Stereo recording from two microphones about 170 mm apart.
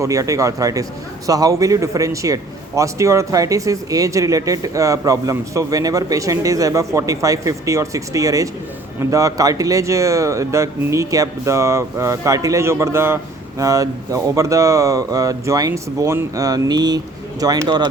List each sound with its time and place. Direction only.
0.0 s a man's voice: 20° right (ahead or behind)